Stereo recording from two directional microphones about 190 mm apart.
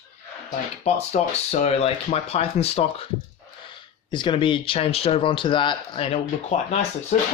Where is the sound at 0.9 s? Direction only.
35° left (ahead or behind).